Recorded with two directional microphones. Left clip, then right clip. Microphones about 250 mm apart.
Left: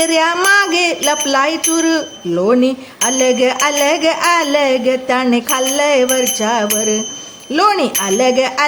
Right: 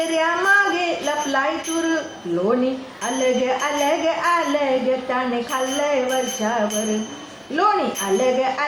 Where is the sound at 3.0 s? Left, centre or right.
Left.